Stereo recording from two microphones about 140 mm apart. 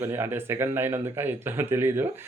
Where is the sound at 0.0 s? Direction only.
15° right (ahead or behind).